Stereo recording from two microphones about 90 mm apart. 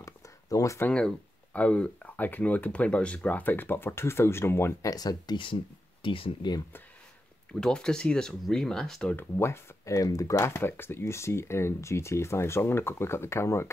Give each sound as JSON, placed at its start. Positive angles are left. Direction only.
{"t": 0.0, "sound": "a sound", "side_deg": 35}
{"t": 0.9, "sound": "speech", "side_deg": 10}
{"t": 4.8, "sound": "speech", "side_deg": 45}
{"t": 6.0, "sound": "speech", "side_deg": 90}
{"t": 7.6, "sound": "speech", "side_deg": 10}
{"t": 9.1, "sound": "speech", "side_deg": 30}